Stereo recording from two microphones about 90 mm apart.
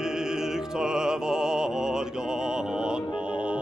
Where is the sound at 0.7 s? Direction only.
5° right (ahead or behind).